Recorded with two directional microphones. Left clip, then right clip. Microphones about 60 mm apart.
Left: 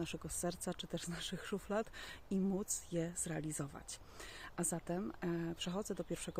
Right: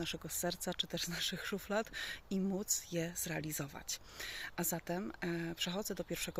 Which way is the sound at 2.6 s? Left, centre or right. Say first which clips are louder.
Right 4 dB; left.